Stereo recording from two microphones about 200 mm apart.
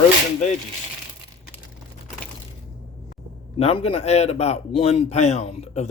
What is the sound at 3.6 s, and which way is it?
A man's voice, 30° left (ahead or behind).